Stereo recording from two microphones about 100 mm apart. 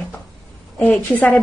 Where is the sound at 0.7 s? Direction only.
15° left (ahead or behind).